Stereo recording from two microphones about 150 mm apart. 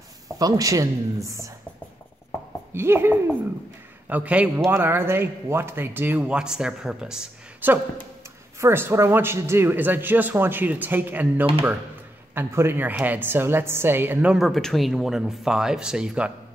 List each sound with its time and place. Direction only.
0.4 s speech: 25° right (ahead or behind)
2.7 s a woman's voice: 15° right (ahead or behind)